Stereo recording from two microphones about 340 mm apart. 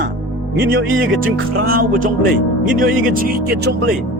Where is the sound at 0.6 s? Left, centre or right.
Right.